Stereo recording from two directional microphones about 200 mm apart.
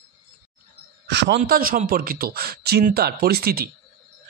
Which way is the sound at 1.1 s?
60° right (ahead or behind).